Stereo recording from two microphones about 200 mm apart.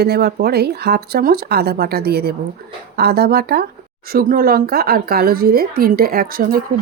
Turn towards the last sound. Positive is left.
turn(degrees=-45)  # may be behind; listen again after turning